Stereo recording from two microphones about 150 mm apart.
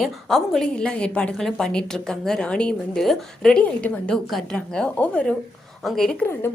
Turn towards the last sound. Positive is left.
turn(degrees=5)  # may be behind; listen again after turning